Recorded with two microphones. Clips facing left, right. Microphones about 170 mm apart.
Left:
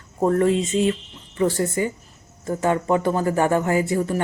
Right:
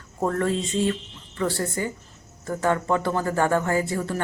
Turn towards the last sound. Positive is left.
turn(degrees=15)  # may be behind; listen again after turning